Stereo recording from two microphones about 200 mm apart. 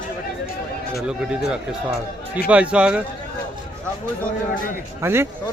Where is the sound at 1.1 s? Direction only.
5° right (ahead or behind).